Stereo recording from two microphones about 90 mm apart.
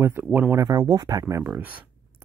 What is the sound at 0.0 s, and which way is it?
Speech, 20° right (ahead or behind).